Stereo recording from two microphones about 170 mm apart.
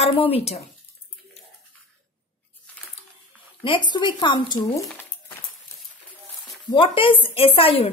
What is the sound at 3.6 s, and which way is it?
A woman's voice, 30° left (ahead or behind).